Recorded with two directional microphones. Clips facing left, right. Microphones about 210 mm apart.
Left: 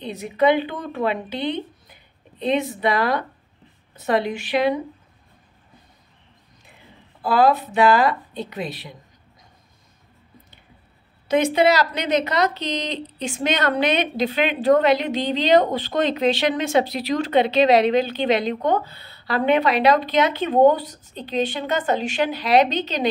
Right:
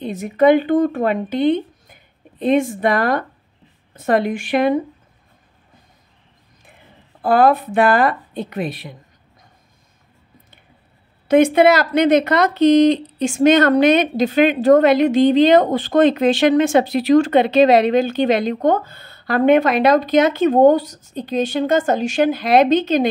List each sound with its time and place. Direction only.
0.0 s speech: 50° right (ahead or behind)
7.2 s speech: 50° right (ahead or behind)
11.2 s speech: 55° right (ahead or behind)